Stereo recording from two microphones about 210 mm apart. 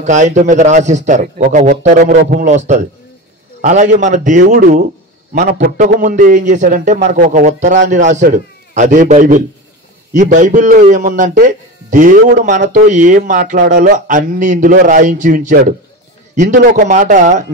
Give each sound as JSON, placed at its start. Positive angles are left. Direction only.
{"t": 0.0, "sound": "a man's voice", "side_deg": -35}